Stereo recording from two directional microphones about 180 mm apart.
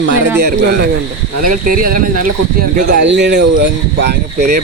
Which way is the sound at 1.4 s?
50° right (ahead or behind).